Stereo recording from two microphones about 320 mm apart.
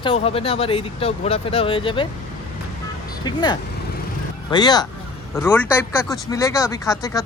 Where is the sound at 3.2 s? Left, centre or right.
Centre.